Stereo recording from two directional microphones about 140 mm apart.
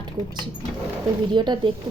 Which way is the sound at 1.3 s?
35° right (ahead or behind).